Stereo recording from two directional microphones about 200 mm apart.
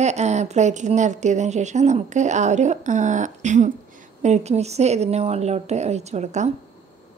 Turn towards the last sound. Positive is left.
turn(degrees=-35)  # may be behind; listen again after turning